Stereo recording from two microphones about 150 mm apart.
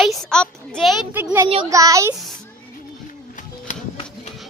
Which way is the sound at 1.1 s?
15° right (ahead or behind).